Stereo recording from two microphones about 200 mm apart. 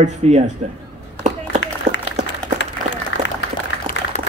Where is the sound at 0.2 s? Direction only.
35° right (ahead or behind).